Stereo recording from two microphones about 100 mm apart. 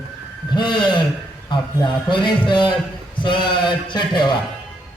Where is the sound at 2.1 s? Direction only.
50° left (ahead or behind).